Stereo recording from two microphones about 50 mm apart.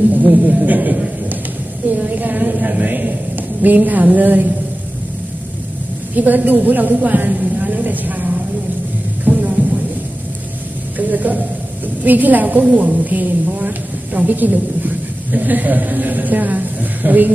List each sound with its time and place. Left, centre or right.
0.1 s a woman's voice: right
6.1 s a woman's voice: right
9.2 s music: right
11.0 s a woman's voice: right